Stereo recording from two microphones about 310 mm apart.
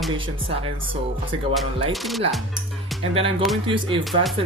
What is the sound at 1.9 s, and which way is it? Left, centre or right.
Speech, centre.